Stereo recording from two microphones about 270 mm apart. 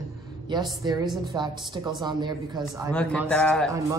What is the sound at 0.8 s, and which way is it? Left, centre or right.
A woman's voice, centre.